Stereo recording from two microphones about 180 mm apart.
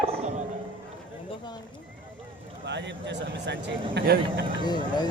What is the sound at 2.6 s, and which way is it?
Speech, 75° right (ahead or behind).